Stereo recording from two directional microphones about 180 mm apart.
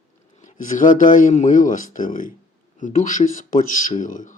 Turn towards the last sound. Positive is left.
turn(degrees=45)  # may be behind; listen again after turning